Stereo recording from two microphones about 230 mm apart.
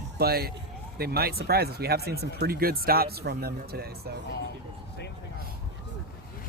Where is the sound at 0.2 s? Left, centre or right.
Right.